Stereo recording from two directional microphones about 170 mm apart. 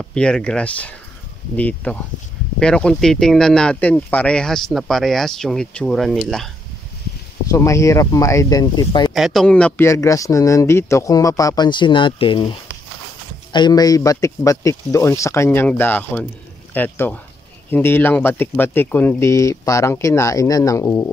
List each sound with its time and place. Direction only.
0.1 s speech: 5° left (ahead or behind)
7.5 s speech: 15° left (ahead or behind)
9.1 s speech: centre (ahead or behind); by 21.1 s 20° left (ahead or behind)